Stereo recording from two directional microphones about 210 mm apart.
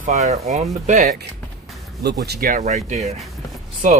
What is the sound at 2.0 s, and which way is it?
Speech, 50° right (ahead or behind).